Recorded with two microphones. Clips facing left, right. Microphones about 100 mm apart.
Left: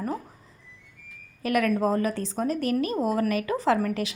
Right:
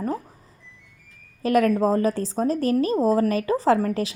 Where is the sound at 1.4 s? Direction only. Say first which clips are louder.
Right 4 dB; 30° right (ahead or behind).